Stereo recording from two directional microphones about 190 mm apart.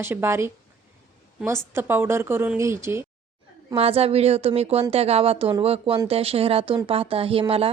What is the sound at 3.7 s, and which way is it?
Speech, 30° right (ahead or behind).